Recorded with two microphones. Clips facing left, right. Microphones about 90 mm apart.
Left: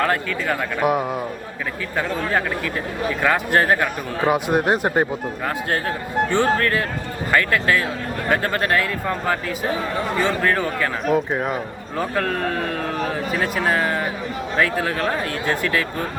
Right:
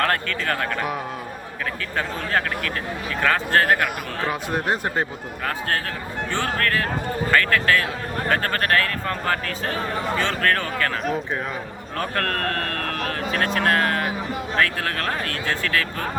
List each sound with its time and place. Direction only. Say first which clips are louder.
0.0 s speech: left 2 dB; 10° left (ahead or behind)
3.2 s speech: left 1 dB; 15° left (ahead or behind)
6.3 s speech: left 3 dB; 20° left (ahead or behind)
11.9 s speech: left 3 dB; 10° left (ahead or behind)